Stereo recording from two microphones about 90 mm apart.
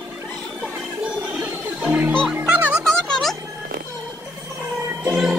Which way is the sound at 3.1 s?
5° left (ahead or behind).